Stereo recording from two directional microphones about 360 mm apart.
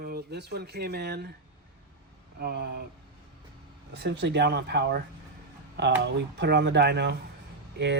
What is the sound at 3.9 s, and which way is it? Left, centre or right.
Speech, right.